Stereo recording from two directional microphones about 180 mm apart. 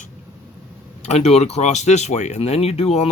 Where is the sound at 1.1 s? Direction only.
35° left (ahead or behind).